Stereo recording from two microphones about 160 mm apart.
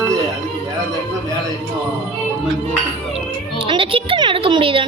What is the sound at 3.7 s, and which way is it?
A child's voice, 35° right (ahead or behind).